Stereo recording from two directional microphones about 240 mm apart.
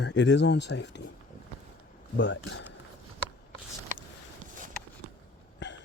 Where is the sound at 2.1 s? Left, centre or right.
Left.